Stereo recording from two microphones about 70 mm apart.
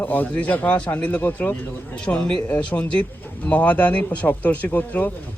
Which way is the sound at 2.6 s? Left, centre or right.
Centre.